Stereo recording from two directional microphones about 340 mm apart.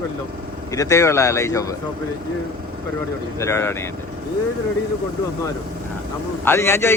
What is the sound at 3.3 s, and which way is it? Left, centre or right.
Speech, centre.